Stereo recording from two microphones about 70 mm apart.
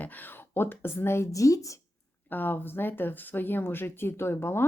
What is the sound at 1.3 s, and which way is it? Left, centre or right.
Speech, left.